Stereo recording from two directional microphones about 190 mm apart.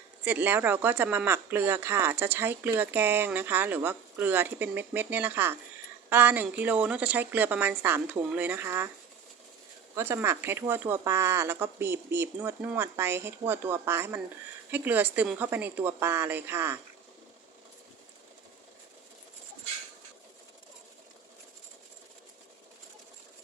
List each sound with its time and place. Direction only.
0.3 s speech: 10° right (ahead or behind)
9.9 s speech: 15° right (ahead or behind)